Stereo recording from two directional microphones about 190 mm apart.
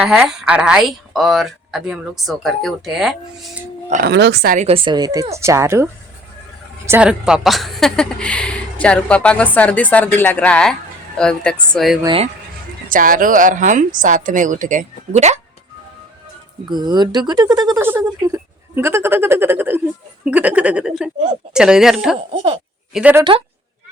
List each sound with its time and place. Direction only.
0.0 s a woman's voice: 5° right (ahead or behind)
4.0 s a woman's voice: 60° right (ahead or behind)
4.5 s a woman's voice: 30° right (ahead or behind); by 11.9 s centre (ahead or behind)
12.0 s speech: 30° right (ahead or behind)
12.9 s a woman's voice: 45° right (ahead or behind)
16.6 s a woman's voice: 20° right (ahead or behind); by 23.2 s 5° right (ahead or behind)